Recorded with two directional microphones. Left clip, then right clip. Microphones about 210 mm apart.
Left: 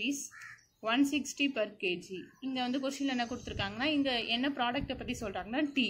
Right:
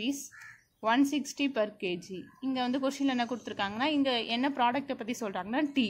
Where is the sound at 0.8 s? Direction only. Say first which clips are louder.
Right 3 dB; 50° right (ahead or behind).